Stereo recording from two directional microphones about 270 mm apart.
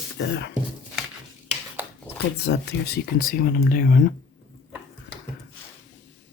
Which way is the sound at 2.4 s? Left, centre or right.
Left.